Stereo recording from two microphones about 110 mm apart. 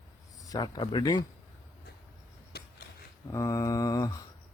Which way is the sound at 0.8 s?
50° left (ahead or behind).